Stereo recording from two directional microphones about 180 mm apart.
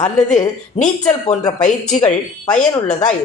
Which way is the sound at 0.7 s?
40° left (ahead or behind).